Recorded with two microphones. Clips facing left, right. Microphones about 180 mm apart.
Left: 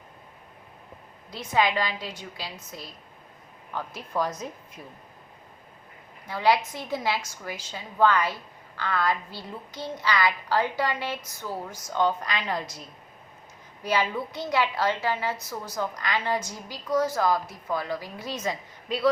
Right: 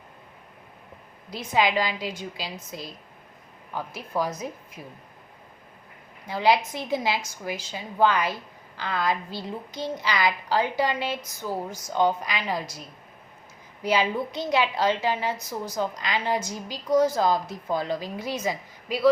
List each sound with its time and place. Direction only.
1.3 s a woman's voice: 10° right (ahead or behind)
6.2 s a woman's voice: 15° right (ahead or behind)
13.8 s a woman's voice: 15° right (ahead or behind)